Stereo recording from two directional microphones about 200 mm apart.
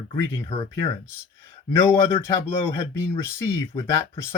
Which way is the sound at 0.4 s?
25° left (ahead or behind).